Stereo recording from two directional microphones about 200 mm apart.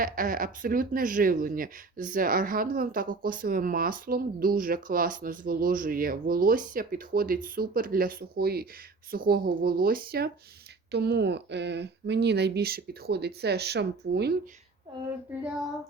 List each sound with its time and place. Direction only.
0.0 s speech: 45° right (ahead or behind)